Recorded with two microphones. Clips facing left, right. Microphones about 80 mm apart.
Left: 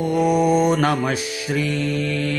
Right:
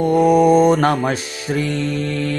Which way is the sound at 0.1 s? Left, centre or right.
Right.